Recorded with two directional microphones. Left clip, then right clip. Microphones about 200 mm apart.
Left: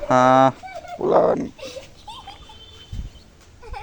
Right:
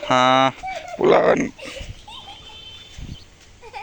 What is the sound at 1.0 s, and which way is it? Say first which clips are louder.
Speech: right 5 dB; 15° right (ahead or behind).